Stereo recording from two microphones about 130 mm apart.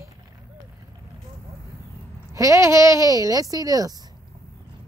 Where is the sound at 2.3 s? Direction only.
25° right (ahead or behind).